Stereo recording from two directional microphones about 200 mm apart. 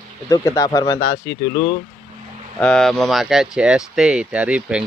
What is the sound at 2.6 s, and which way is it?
Speech, 5° left (ahead or behind).